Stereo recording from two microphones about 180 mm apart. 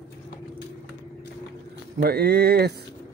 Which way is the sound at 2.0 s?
60° right (ahead or behind).